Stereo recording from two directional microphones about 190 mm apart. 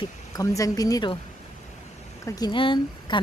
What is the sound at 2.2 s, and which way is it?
Speech, 20° left (ahead or behind).